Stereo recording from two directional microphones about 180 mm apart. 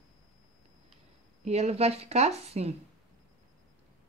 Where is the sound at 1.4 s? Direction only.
35° right (ahead or behind).